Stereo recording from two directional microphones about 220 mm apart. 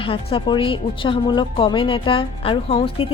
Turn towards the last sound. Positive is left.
turn(degrees=25)  # may be behind; listen again after turning